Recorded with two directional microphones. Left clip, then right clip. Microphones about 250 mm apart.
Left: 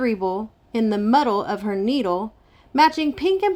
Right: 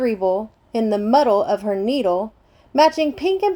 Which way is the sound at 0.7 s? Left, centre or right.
Centre.